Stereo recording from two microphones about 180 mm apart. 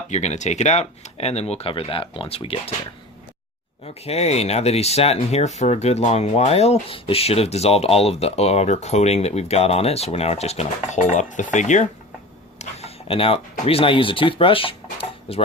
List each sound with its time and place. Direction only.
0.1 s speech: 40° left (ahead or behind)
4.0 s speech: 35° left (ahead or behind)